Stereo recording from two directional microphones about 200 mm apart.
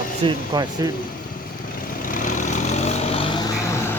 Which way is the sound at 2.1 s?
40° left (ahead or behind).